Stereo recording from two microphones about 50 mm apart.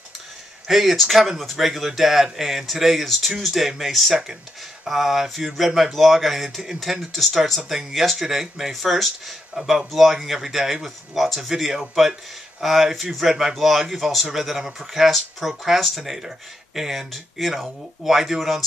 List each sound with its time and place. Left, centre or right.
0.7 s speech: centre
1.7 s speech: centre